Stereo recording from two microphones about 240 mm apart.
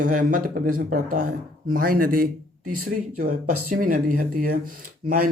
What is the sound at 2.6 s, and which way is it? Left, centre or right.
Speech, right.